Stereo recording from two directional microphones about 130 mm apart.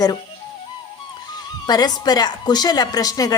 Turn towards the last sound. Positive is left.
turn(degrees=30)  # may be behind; listen again after turning